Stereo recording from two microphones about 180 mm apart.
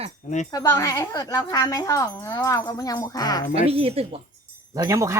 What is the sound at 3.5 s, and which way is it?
Speech, 35° right (ahead or behind).